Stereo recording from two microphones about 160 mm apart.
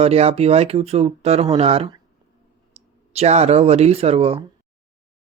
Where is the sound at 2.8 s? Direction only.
40° right (ahead or behind).